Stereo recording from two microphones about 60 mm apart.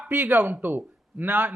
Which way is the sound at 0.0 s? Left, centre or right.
Right.